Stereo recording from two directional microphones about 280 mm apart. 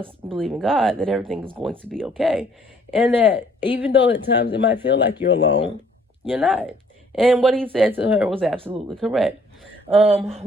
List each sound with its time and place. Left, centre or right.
0.3 s speech: centre
3.9 s speech: left
6.2 s speech: centre
9.9 s speech: centre